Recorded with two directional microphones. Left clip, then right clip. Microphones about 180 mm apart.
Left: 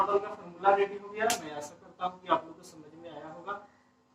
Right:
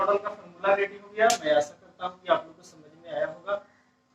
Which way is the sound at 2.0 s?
15° right (ahead or behind).